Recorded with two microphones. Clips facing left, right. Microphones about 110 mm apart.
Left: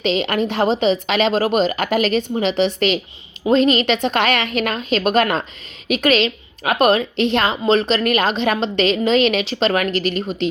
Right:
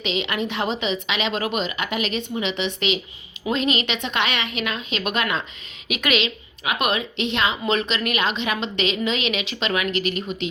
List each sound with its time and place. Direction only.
0.0 s a woman's voice: 40° left (ahead or behind)